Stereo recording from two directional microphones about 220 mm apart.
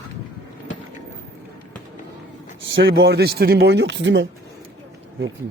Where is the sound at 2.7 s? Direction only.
55° right (ahead or behind).